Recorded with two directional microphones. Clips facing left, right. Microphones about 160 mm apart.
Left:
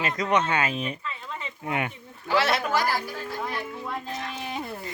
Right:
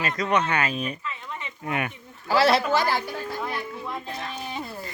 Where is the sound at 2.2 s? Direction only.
35° right (ahead or behind).